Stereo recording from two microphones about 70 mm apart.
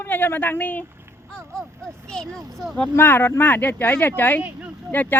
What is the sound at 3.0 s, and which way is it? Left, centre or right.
Speech, left.